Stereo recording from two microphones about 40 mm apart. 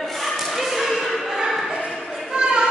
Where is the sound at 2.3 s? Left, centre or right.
Right.